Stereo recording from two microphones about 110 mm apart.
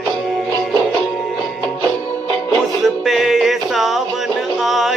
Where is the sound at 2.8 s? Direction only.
Centre (ahead or behind).